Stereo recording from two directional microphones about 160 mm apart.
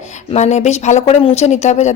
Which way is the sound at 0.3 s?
45° left (ahead or behind).